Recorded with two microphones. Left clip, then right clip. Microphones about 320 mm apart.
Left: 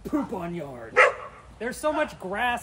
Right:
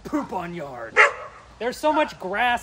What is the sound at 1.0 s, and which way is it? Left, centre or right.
Speech, centre.